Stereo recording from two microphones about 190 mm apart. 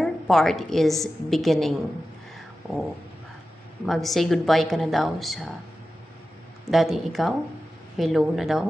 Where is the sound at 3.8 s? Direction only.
Centre (ahead or behind).